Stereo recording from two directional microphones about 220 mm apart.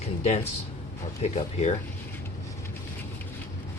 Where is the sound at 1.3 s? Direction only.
30° left (ahead or behind).